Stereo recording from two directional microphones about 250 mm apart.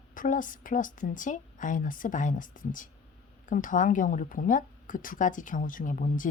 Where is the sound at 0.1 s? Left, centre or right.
Left.